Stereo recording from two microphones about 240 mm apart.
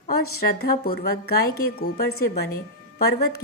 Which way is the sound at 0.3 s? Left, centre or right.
Left.